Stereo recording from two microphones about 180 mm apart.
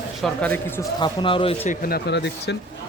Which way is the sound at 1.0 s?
25° left (ahead or behind).